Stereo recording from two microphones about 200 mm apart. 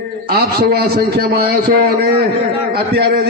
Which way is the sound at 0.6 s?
50° right (ahead or behind).